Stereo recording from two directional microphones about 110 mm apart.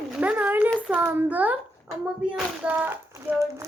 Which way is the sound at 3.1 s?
25° right (ahead or behind).